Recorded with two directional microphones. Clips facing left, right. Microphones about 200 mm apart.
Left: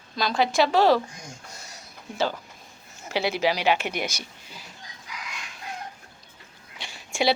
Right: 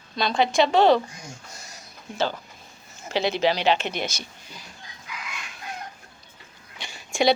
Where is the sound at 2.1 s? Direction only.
10° left (ahead or behind).